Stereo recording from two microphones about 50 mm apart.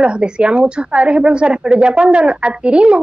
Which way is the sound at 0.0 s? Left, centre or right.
Right.